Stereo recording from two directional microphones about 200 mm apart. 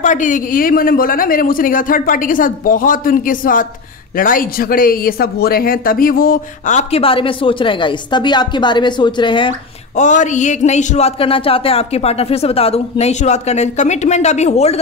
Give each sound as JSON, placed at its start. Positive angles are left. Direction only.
{"t": 0.0, "sound": "speech", "side_deg": 40}
{"t": 9.9, "sound": "speech", "side_deg": 40}